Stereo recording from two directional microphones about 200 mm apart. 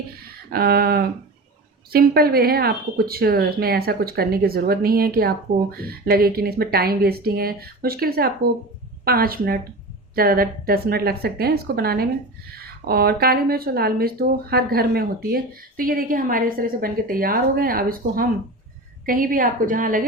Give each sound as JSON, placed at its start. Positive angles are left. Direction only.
{"t": 0.5, "sound": "speech", "side_deg": -50}